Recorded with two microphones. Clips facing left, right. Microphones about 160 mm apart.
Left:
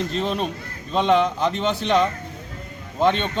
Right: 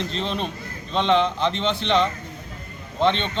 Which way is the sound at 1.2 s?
40° left (ahead or behind).